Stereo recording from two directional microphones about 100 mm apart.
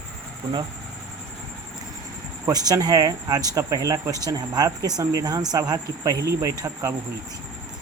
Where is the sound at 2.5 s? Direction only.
40° right (ahead or behind).